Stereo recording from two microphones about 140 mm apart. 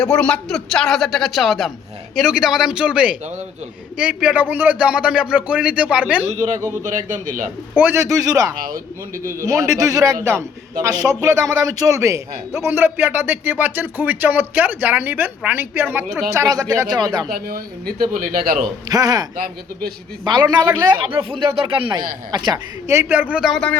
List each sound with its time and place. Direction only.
0.0 s speech: 5° left (ahead or behind); by 6.2 s 10° right (ahead or behind)
6.4 s a man's voice: 20° right (ahead or behind)
6.8 s a man's voice: 65° right (ahead or behind)
7.8 s a man's voice: 15° right (ahead or behind)
17.2 s speech: 90° right
18.9 s a man's voice: 25° right (ahead or behind)
22.9 s speech: 15° right (ahead or behind); by 23.7 s 5° left (ahead or behind)